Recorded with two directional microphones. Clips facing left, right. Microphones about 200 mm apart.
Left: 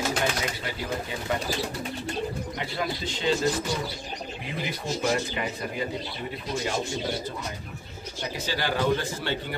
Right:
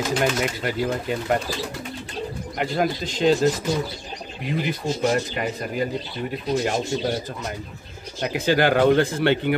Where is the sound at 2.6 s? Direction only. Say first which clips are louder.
Right 9 dB; 45° right (ahead or behind).